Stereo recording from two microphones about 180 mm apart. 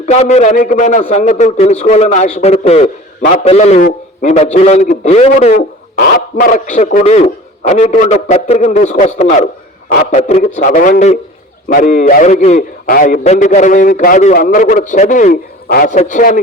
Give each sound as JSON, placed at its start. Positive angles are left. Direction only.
{"t": 0.0, "sound": "a man's voice", "side_deg": 40}
{"t": 9.9, "sound": "a man's voice", "side_deg": 50}
{"t": 10.2, "sound": "a man's voice", "side_deg": 40}
{"t": 12.8, "sound": "a man's voice", "side_deg": 55}